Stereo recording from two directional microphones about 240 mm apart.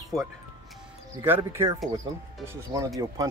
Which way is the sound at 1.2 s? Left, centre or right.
Centre.